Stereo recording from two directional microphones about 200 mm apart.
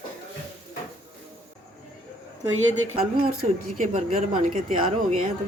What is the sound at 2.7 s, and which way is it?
Speech, 30° right (ahead or behind).